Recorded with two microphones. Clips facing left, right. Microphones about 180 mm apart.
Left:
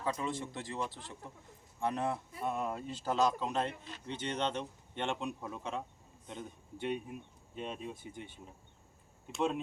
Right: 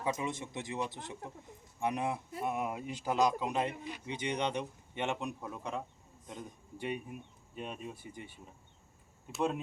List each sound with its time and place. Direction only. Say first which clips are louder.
0.0 s speech: right 1 dB; 20° right (ahead or behind)
6.8 s speech: left 1 dB; 5° right (ahead or behind)